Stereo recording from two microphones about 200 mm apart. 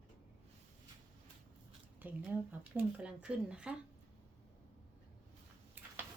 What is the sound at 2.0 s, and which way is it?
Speech, 10° right (ahead or behind).